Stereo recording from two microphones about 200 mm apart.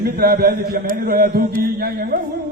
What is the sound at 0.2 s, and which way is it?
A man's voice, 50° right (ahead or behind).